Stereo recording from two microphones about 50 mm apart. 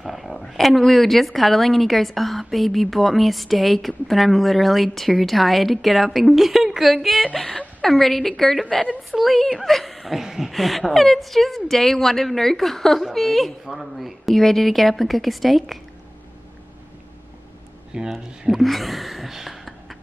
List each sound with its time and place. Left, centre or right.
0.0 s speech: centre
17.9 s speech: centre
18.4 s speech: centre